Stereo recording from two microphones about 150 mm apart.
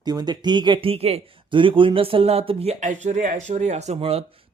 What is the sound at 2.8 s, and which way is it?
Speech, 50° right (ahead or behind).